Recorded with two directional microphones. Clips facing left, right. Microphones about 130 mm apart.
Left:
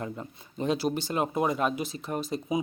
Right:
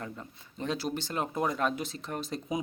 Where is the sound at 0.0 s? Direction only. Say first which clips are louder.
Left 5 dB; 20° left (ahead or behind).